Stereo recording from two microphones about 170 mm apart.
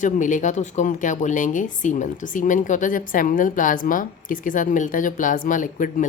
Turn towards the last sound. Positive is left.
turn(degrees=50)  # may be behind; listen again after turning